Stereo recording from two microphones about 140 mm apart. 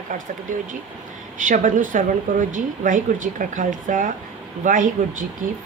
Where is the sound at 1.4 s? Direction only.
70° right (ahead or behind).